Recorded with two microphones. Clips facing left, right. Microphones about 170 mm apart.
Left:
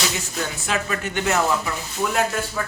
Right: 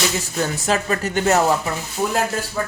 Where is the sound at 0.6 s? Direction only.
40° right (ahead or behind).